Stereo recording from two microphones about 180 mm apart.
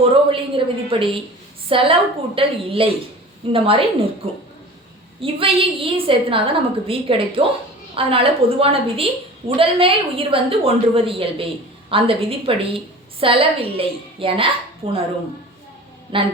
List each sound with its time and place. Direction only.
0.0 s a woman's voice: 30° right (ahead or behind)
5.2 s a woman's voice: 30° right (ahead or behind)
16.1 s a woman's voice: 30° right (ahead or behind)